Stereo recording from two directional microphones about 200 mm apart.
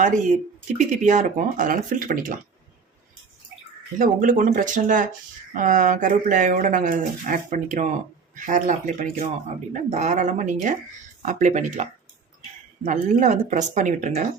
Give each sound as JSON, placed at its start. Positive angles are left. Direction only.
{"t": 0.8, "sound": "speech", "side_deg": -40}
{"t": 3.9, "sound": "speech", "side_deg": -40}